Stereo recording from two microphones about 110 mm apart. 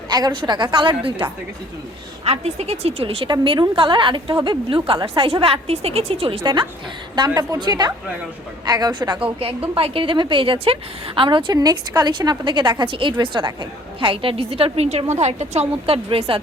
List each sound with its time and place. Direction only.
0.1 s a woman's voice: 40° right (ahead or behind)
2.2 s a woman's voice: 70° right (ahead or behind)
3.2 s a woman's voice: 45° right (ahead or behind)
9.7 s a woman's voice: 55° right (ahead or behind)
11.5 s a woman's voice: 35° right (ahead or behind); by 15.0 s 70° right (ahead or behind)
15.1 s a woman's voice: 80° right
16.0 s a woman's voice: 55° right (ahead or behind)